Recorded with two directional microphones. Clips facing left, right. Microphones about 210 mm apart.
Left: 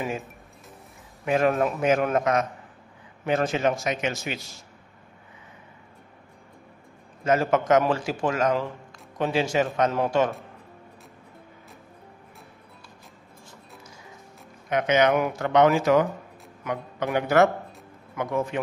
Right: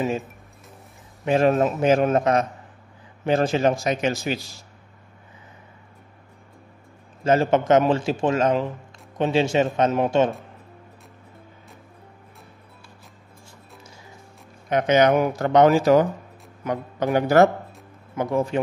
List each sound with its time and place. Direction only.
1.2 s a man's voice: 30° right (ahead or behind)
7.2 s a man's voice: 30° right (ahead or behind)
14.7 s speech: 35° right (ahead or behind)